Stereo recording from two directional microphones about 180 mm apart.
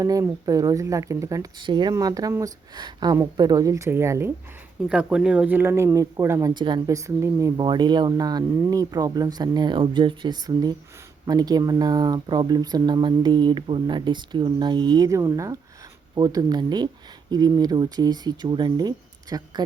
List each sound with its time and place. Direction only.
0.0 s speech: 20° right (ahead or behind)